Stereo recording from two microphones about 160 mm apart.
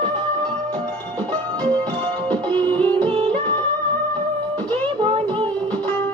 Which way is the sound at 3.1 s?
30° right (ahead or behind).